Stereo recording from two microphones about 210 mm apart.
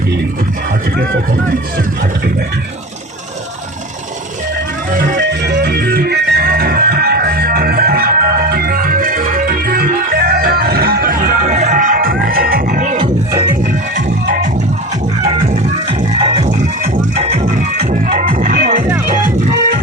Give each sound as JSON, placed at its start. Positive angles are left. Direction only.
{"t": 4.9, "sound": "music", "side_deg": -40}
{"t": 5.3, "sound": "music", "side_deg": -50}
{"t": 15.2, "sound": "music", "side_deg": -30}